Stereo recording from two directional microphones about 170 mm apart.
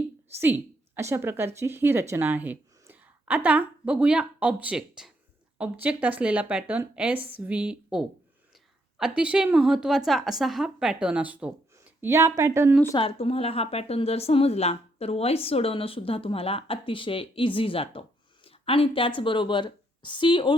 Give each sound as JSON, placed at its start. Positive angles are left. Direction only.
{"t": 0.3, "sound": "a woman's voice", "side_deg": -10}
{"t": 13.0, "sound": "speech", "side_deg": 35}